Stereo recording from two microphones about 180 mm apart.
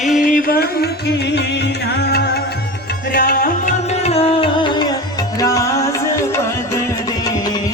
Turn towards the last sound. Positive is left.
turn(degrees=15)  # may be behind; listen again after turning